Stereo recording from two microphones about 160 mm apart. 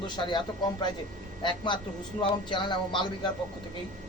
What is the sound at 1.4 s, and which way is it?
Speech, 30° left (ahead or behind).